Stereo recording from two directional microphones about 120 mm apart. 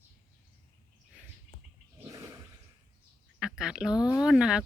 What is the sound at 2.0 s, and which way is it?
Toilet flush, 30° right (ahead or behind).